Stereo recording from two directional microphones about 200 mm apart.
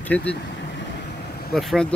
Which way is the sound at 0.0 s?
5° left (ahead or behind).